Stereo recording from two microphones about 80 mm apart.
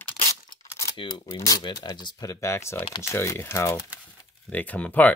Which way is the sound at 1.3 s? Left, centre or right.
Left.